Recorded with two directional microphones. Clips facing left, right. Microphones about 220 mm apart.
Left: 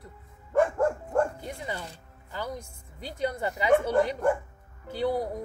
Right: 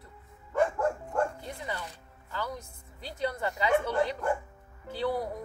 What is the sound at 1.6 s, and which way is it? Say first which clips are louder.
Speech: left 1 dB; 25° left (ahead or behind).